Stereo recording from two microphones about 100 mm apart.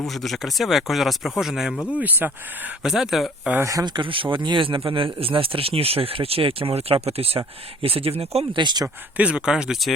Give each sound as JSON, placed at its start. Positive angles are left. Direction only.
{"t": 0.2, "sound": "speech", "side_deg": 0}
{"t": 2.0, "sound": "speech", "side_deg": -20}
{"t": 2.8, "sound": "speech", "side_deg": -5}
{"t": 3.6, "sound": "speech", "side_deg": -35}
{"t": 3.8, "sound": "speech", "side_deg": -55}
{"t": 8.5, "sound": "speech", "side_deg": -45}
{"t": 9.1, "sound": "speech", "side_deg": -10}